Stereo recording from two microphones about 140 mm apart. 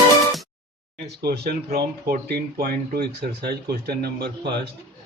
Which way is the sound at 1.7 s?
90° right.